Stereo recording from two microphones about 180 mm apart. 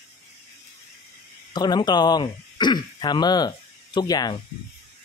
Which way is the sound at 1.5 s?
25° left (ahead or behind).